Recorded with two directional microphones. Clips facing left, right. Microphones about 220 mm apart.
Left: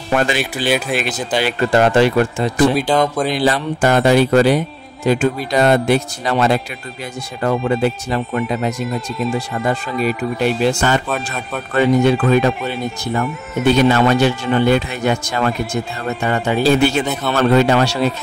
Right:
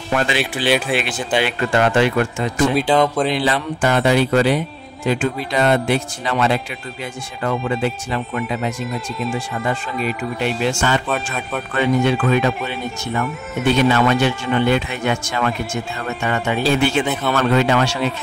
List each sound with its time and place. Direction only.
0.3 s speech: 45° left (ahead or behind)
0.7 s a man's voice: centre (ahead or behind)
0.9 s speech: 40° left (ahead or behind)
2.9 s a man's voice: 5° right (ahead or behind)
3.3 s speech: 40° left (ahead or behind)
11.1 s a man's voice: centre (ahead or behind)
11.7 s speech: 40° left (ahead or behind)
17.0 s a man's voice: 5° right (ahead or behind)
17.4 s speech: 40° left (ahead or behind)